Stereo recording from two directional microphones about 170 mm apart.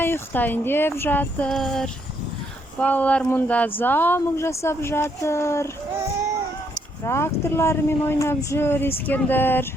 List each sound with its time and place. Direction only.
0.0 s speech: 10° left (ahead or behind)
6.7 s speech: 15° left (ahead or behind)